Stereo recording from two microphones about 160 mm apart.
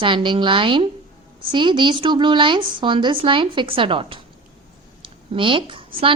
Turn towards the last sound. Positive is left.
turn(degrees=-35)  # may be behind; listen again after turning